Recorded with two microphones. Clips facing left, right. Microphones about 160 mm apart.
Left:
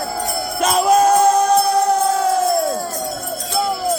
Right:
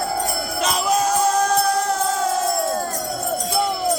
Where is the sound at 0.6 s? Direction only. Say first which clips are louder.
Left 7 dB; 50° left (ahead or behind).